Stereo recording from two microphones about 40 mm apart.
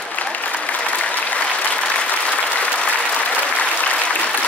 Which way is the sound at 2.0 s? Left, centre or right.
Left.